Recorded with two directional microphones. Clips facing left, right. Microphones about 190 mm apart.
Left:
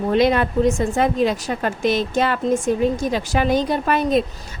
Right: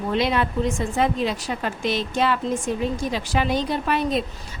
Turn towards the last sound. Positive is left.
turn(degrees=45)  # may be behind; listen again after turning